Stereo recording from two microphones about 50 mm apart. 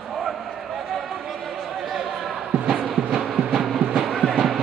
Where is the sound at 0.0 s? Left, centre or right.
Centre.